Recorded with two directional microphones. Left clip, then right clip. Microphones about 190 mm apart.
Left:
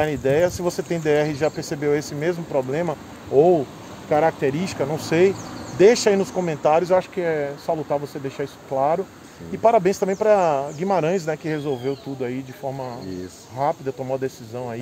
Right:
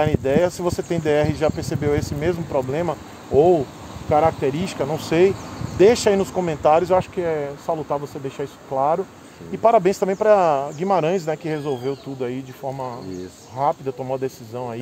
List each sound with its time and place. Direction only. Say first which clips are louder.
0.0 s speech: even; 15° right (ahead or behind)